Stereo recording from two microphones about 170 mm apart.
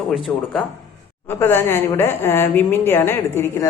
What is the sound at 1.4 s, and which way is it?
Speech, 15° left (ahead or behind).